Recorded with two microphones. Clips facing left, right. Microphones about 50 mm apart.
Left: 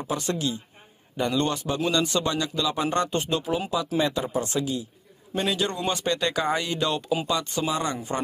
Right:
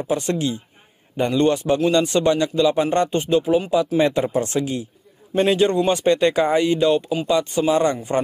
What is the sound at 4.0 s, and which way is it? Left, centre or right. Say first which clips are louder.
A man's voice: right 6 dB; right.